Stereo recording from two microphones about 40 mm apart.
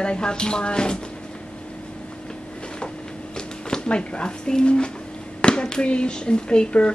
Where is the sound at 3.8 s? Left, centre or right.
Left.